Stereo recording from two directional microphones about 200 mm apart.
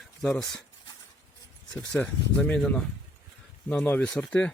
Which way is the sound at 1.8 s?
5° left (ahead or behind).